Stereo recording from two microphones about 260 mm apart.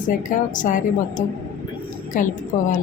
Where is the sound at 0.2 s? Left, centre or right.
Left.